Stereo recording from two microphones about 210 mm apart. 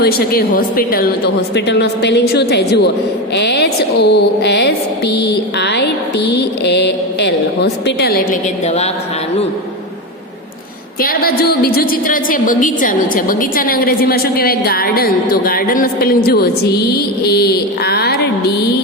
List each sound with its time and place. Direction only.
0.0 s a woman's voice: 45° left (ahead or behind)
8.6 s speech: 30° left (ahead or behind)
11.0 s a woman's voice: 45° left (ahead or behind)